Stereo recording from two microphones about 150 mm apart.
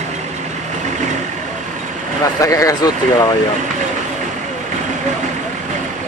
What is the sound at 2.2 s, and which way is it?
Speech, 20° left (ahead or behind).